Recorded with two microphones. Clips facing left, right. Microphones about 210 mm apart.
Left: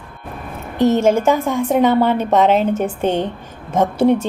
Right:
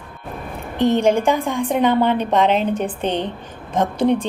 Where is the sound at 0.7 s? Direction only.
45° left (ahead or behind).